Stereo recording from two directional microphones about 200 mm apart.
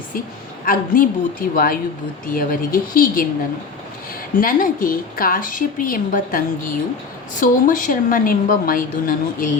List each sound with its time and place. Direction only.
0.6 s a woman's voice: 45° left (ahead or behind)
4.4 s a woman's voice: 45° left (ahead or behind)